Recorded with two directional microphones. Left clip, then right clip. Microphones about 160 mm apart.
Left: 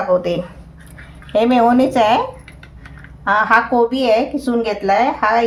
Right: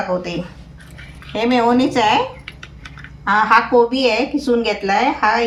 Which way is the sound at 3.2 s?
90° left.